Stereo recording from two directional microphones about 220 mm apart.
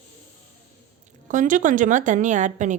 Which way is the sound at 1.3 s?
35° right (ahead or behind).